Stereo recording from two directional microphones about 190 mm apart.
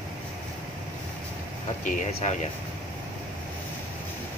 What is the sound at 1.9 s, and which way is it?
Speech, 40° left (ahead or behind).